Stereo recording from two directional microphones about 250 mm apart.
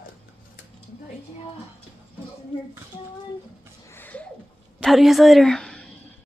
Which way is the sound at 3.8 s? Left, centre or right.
Centre.